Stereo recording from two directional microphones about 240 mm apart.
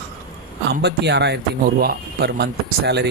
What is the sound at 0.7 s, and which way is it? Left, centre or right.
Speech, right.